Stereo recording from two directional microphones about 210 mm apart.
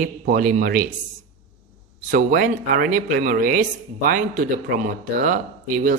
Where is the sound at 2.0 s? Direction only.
40° right (ahead or behind).